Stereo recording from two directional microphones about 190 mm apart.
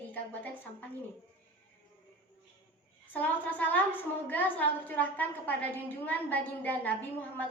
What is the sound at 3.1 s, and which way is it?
A woman's voice, 10° left (ahead or behind).